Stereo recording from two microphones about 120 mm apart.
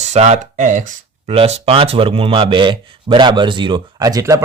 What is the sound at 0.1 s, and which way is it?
Speech, 70° right (ahead or behind).